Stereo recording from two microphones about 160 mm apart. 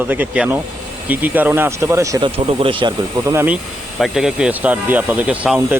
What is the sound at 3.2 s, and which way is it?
Speech, 15° right (ahead or behind).